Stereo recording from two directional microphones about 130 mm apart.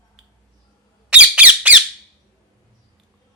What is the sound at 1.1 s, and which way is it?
Squeak, 10° right (ahead or behind).